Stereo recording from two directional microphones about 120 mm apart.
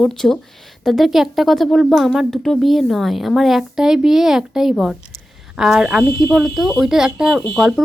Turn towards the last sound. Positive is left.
turn(degrees=-5)  # may be behind; listen again after turning